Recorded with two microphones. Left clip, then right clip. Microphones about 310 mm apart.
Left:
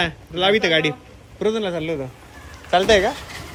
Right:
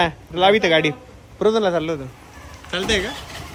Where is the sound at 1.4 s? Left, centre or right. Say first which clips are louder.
Right 4 dB; right.